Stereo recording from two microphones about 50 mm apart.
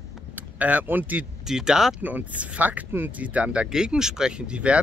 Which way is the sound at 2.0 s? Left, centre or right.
Right.